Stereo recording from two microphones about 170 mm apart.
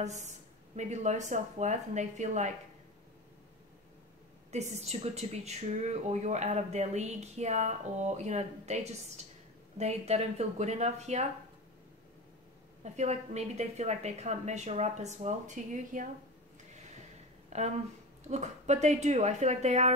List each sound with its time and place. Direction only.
0.0 s a woman's voice: 45° right (ahead or behind)
4.5 s speech: 40° right (ahead or behind)
12.8 s speech: 40° right (ahead or behind)
17.5 s speech: 40° right (ahead or behind)